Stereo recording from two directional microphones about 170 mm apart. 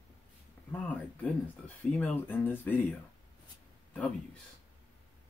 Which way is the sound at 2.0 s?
10° left (ahead or behind).